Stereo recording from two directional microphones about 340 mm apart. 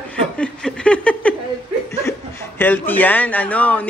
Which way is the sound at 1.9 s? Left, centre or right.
Centre.